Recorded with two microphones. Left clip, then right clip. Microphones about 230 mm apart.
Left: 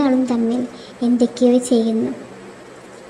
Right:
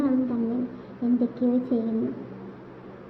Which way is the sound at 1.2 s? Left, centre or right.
Left.